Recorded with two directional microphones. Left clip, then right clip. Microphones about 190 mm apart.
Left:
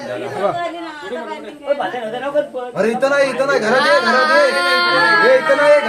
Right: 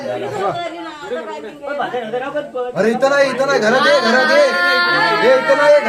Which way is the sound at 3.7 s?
30° left (ahead or behind).